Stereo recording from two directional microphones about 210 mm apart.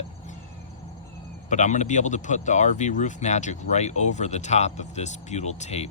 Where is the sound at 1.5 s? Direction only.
35° left (ahead or behind).